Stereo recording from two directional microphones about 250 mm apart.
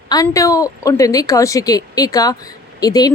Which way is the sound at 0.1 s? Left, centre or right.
Centre.